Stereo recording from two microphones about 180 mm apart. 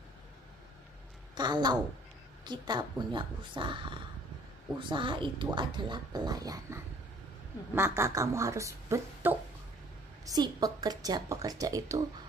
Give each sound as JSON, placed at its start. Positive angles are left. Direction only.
{"t": 1.3, "sound": "a woman's voice", "side_deg": -25}